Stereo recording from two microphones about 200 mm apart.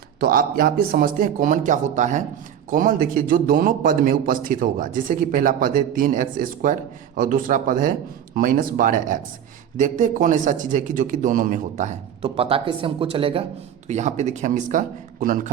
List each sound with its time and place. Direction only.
0.2 s a man's voice: 45° right (ahead or behind)